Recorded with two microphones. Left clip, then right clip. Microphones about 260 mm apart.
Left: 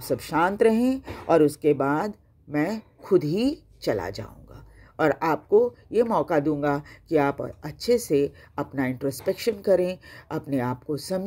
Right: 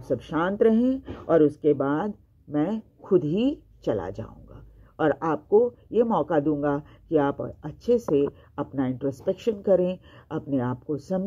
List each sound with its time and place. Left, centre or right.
0.1 s speech: left
7.8 s speech: left